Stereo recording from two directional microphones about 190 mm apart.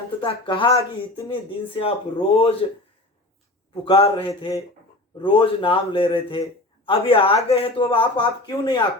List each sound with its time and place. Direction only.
0.2 s speech: 25° left (ahead or behind)
3.8 s speech: 30° left (ahead or behind)
4.3 s speech: 15° left (ahead or behind)